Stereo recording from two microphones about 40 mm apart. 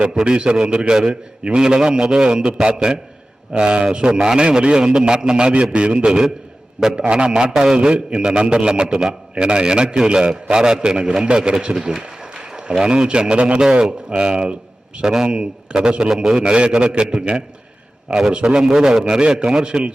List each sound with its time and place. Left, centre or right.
0.0 s a man's voice: right
12.0 s a sound: centre
12.8 s a man's voice: right